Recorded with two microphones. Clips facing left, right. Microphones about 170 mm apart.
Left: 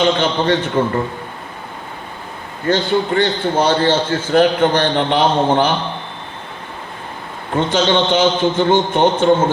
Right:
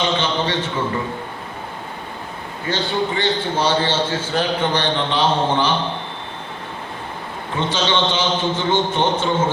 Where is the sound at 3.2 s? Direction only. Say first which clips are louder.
Left 4 dB; 55° left (ahead or behind).